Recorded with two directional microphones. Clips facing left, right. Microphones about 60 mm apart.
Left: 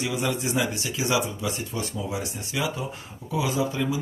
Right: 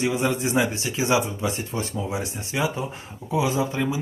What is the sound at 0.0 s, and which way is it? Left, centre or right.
Speech, right.